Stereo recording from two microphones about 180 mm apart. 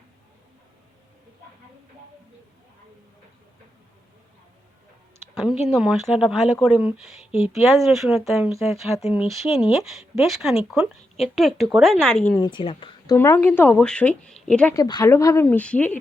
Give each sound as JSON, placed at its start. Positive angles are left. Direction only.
{"t": 5.6, "sound": "speech", "side_deg": 0}
{"t": 12.4, "sound": "a woman's voice", "side_deg": 25}
{"t": 13.1, "sound": "speech", "side_deg": 15}
{"t": 14.7, "sound": "speech", "side_deg": 20}